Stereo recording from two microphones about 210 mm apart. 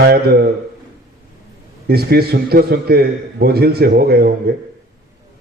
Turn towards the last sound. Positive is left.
turn(degrees=-50)  # may be behind; listen again after turning